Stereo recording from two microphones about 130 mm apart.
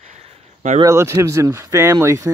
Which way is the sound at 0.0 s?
55° right (ahead or behind).